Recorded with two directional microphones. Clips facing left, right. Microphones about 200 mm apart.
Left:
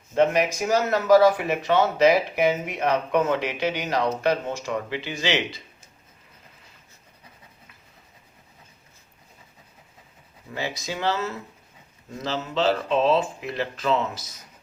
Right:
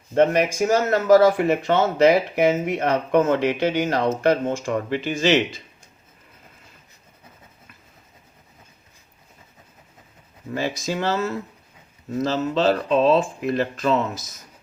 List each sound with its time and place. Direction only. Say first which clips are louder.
0.1 s speech: right 3 dB; 50° right (ahead or behind)
10.5 s speech: right 5 dB; 45° right (ahead or behind)